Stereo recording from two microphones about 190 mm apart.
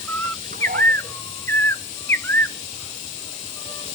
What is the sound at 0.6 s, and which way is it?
Dog, 50° right (ahead or behind).